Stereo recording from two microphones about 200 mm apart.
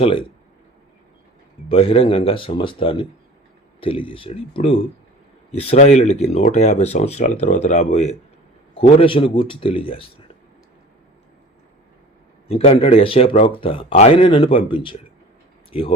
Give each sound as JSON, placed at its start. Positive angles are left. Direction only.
{"t": 0.0, "sound": "speech", "side_deg": 25}
{"t": 1.7, "sound": "speech", "side_deg": 30}
{"t": 12.5, "sound": "speech", "side_deg": 30}